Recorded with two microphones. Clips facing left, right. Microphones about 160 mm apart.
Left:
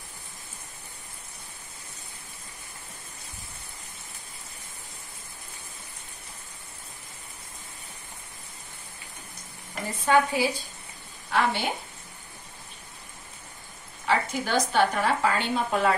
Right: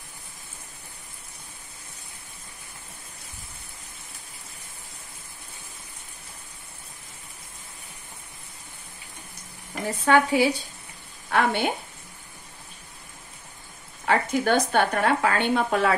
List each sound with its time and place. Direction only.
9.8 s speech: 75° right (ahead or behind)
11.2 s a woman's voice: 55° right (ahead or behind)
14.0 s speech: 55° right (ahead or behind)